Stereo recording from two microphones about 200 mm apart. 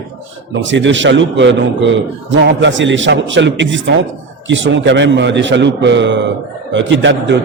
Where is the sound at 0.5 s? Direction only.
65° right (ahead or behind).